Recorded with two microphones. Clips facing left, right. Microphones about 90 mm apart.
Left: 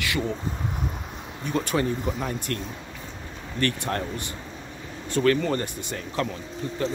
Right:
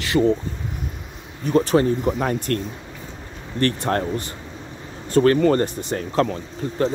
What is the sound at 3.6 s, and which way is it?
Speech, 35° right (ahead or behind).